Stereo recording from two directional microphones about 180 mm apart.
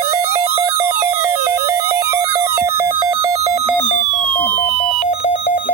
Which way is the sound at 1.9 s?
15° right (ahead or behind).